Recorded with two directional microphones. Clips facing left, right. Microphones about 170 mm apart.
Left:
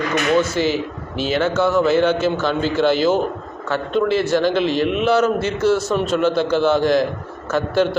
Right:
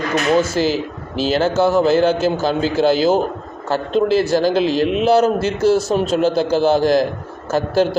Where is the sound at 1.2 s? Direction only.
35° right (ahead or behind).